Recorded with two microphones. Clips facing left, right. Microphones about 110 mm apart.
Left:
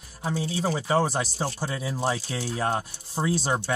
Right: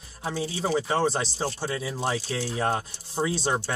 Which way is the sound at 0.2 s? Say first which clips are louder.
Left 1 dB; centre (ahead or behind).